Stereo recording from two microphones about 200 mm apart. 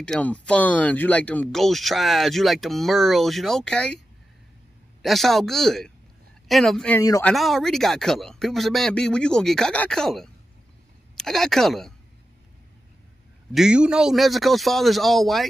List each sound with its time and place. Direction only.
0.0 s speech: 5° left (ahead or behind)
5.0 s speech: centre (ahead or behind)
7.0 s speech: 15° left (ahead or behind)
7.2 s speech: centre (ahead or behind)
13.5 s speech: 5° right (ahead or behind)